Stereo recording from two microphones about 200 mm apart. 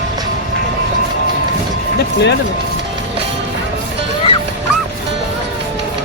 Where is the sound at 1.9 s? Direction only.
55° left (ahead or behind).